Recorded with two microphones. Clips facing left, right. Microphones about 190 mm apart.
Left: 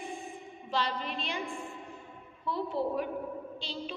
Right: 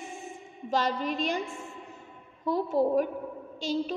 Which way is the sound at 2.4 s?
45° right (ahead or behind).